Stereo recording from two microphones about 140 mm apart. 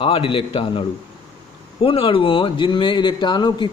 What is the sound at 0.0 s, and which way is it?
A man's voice, 40° left (ahead or behind).